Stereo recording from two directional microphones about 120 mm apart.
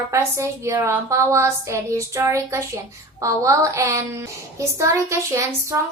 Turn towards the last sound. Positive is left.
turn(degrees=-25)  # may be behind; listen again after turning